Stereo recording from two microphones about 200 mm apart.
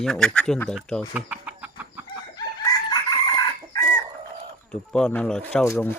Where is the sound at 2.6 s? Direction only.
20° left (ahead or behind).